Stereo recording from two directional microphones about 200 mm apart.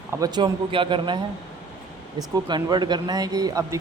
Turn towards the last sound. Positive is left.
turn(degrees=-15)  # may be behind; listen again after turning